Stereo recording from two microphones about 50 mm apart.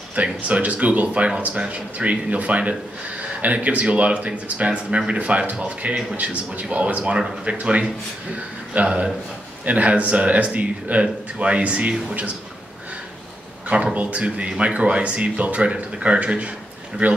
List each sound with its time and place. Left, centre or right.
0.1 s speech: right
13.9 s speech: right